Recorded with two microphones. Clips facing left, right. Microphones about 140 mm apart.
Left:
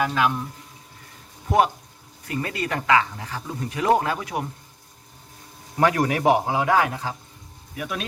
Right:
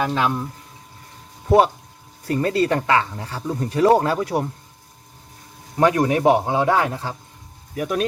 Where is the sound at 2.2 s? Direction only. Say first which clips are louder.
Right 8 dB; 35° right (ahead or behind).